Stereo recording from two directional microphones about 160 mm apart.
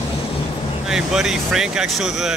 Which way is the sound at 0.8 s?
5° right (ahead or behind).